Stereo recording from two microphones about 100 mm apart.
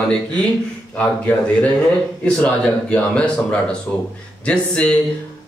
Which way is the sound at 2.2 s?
10° left (ahead or behind).